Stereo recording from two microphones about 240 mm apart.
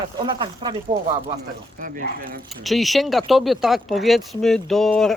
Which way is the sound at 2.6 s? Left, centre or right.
Centre.